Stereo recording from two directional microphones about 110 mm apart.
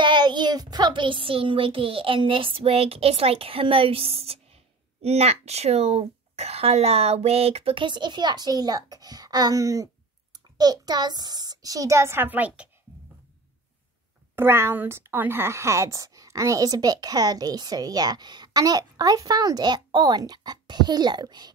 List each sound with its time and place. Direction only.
0.0 s a woman's voice: 45° right (ahead or behind); by 12.6 s 15° right (ahead or behind)
14.3 s a woman's voice: 20° right (ahead or behind); by 21.5 s 40° right (ahead or behind)